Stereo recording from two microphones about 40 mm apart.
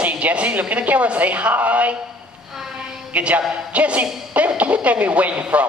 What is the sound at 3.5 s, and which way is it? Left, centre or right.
Speech, right.